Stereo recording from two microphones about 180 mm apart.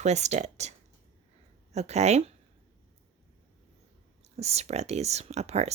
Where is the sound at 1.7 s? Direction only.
40° right (ahead or behind).